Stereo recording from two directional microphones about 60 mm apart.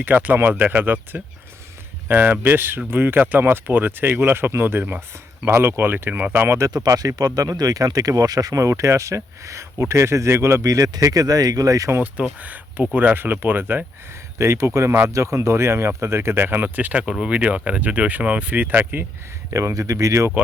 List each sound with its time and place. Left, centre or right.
0.0 s speech: right
5.5 s speech: right
6.6 s speech: right
8.8 s speech: right
10.6 s speech: right
12.1 s speech: right
14.3 s speech: right
16.6 s speech: right
17.1 s speech: centre; by 19.0 s right
19.5 s speech: right
19.7 s speech: right